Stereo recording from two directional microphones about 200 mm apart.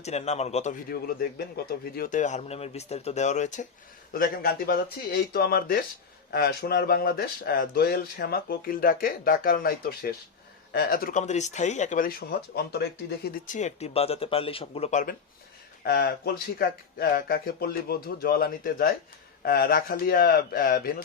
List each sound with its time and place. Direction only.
0.0 s speech: 35° left (ahead or behind)
0.9 s speech: 50° left (ahead or behind)
15.8 s speech: 55° left (ahead or behind)